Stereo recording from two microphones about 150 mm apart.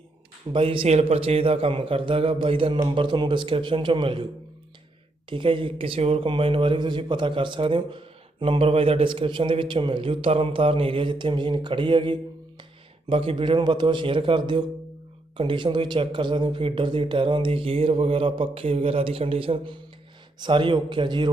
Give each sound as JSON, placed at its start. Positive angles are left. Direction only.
{"t": 0.5, "sound": "speech", "side_deg": -35}
{"t": 5.3, "sound": "speech", "side_deg": -35}